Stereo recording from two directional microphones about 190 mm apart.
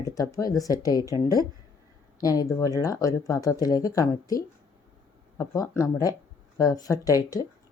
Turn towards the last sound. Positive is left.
turn(degrees=20)  # may be behind; listen again after turning